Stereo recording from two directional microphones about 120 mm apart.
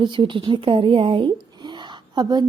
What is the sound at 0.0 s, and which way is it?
A woman's voice, 45° right (ahead or behind).